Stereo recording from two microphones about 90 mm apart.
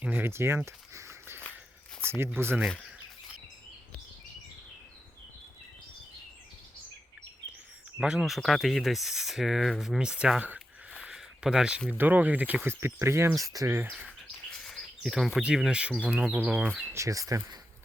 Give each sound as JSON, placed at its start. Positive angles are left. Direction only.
{"t": 0.0, "sound": "a sound", "side_deg": -20}
{"t": 2.0, "sound": "speech", "side_deg": -25}
{"t": 7.9, "sound": "speech", "side_deg": -5}
{"t": 11.0, "sound": "a sound", "side_deg": -10}
{"t": 11.9, "sound": "speech", "side_deg": -20}
{"t": 12.6, "sound": "speech", "side_deg": -30}
{"t": 14.5, "sound": "bird", "side_deg": 5}
{"t": 15.4, "sound": "speech", "side_deg": -5}
{"t": 16.9, "sound": "speech", "side_deg": -35}